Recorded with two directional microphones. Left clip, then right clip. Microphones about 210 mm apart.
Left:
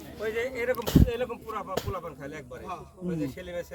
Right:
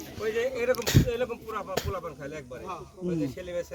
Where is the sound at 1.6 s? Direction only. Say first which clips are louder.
Right 1 dB; 10° left (ahead or behind).